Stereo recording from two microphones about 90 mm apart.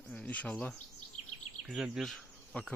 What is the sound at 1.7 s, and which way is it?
Speech, 5° right (ahead or behind).